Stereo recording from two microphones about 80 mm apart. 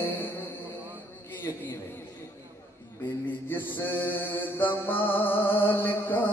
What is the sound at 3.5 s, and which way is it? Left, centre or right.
Music, left.